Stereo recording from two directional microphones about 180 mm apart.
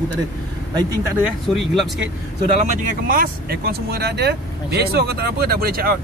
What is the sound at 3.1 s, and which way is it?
Speech, 55° right (ahead or behind).